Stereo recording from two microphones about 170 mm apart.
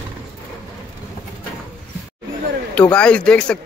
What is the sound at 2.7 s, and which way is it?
Speech, 5° left (ahead or behind).